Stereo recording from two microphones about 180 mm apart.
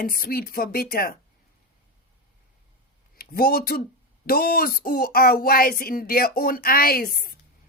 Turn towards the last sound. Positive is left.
turn(degrees=55)  # may be behind; listen again after turning